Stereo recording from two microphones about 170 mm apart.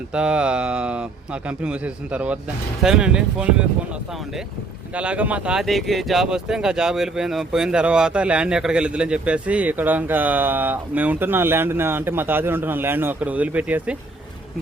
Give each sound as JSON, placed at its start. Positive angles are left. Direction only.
{"t": 0.1, "sound": "speech", "side_deg": -5}
{"t": 4.9, "sound": "speech", "side_deg": -10}